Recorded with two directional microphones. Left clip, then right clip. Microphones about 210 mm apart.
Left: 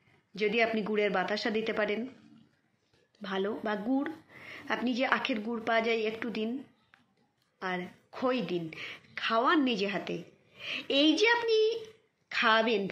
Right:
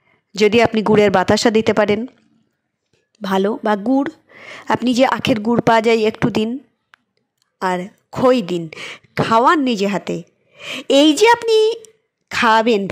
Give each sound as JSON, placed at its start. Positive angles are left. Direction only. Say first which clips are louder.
{"t": 0.3, "sound": "a woman's voice", "louder": "right 15 dB", "side_deg": -60}
{"t": 3.2, "sound": "a woman's voice", "louder": "right 15 dB", "side_deg": -55}